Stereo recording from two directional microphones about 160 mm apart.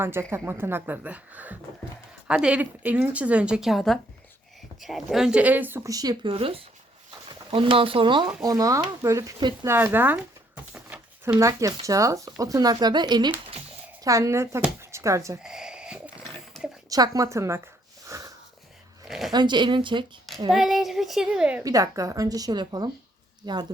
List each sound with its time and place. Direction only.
0.0 s speech: 15° right (ahead or behind)
9.6 s speech: 15° right (ahead or behind)
15.4 s a sound: 5° right (ahead or behind)
16.9 s speech: 20° right (ahead or behind)
18.1 s wheeze: 20° right (ahead or behind)
19.0 s zipper: 5° right (ahead or behind)
19.3 s speech: 30° right (ahead or behind)
20.5 s a woman's voice: centre (ahead or behind)
21.6 s speech: 20° right (ahead or behind)